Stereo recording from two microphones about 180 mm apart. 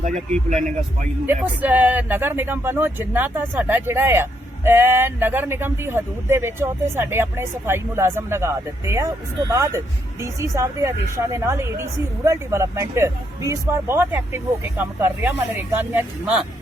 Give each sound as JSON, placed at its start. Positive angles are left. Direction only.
{"t": 0.0, "sound": "speech", "side_deg": -40}
{"t": 1.3, "sound": "speech", "side_deg": -10}